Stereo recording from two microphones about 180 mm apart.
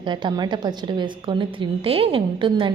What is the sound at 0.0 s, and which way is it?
A woman's voice, 25° right (ahead or behind).